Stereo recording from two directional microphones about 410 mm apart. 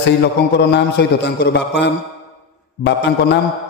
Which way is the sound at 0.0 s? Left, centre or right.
Left.